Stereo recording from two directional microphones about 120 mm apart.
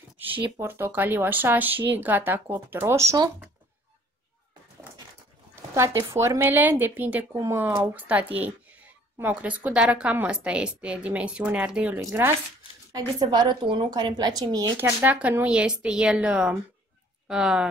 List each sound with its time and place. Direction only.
0.2 s a woman's voice: 15° right (ahead or behind)
5.8 s a woman's voice: 25° right (ahead or behind)
12.0 s speech: 25° right (ahead or behind)
12.9 s speech: 35° right (ahead or behind)
14.8 s a woman's voice: 15° right (ahead or behind)